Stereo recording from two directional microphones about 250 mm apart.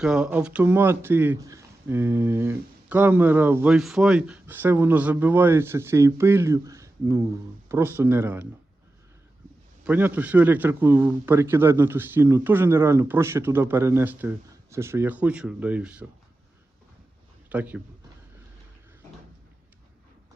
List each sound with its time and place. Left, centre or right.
0.0 s speech: centre
9.8 s speech: centre
17.5 s a man's voice: centre